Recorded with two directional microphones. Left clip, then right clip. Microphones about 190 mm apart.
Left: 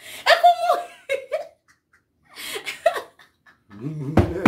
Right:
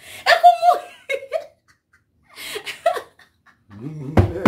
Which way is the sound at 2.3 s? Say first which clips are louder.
Right 1 dB; 15° right (ahead or behind).